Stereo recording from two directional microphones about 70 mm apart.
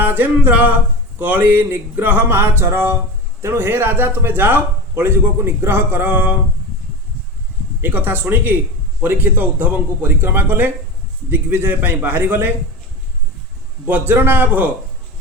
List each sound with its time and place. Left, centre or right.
0.0 s a man's voice: right
7.8 s a man's voice: right
13.8 s a man's voice: right